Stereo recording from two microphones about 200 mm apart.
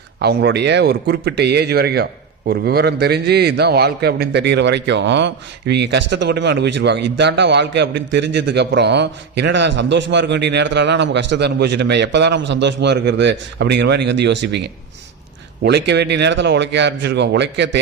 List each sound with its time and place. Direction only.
0.2 s a man's voice: 55° right (ahead or behind)
15.6 s a man's voice: 60° right (ahead or behind)